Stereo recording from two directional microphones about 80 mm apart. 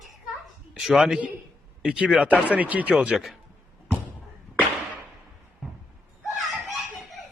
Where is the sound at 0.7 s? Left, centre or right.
Centre.